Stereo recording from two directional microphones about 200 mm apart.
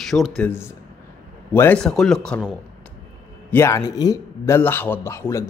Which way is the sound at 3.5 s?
15° left (ahead or behind).